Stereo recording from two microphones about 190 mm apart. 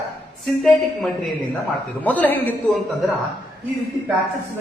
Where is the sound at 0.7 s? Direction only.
Centre (ahead or behind).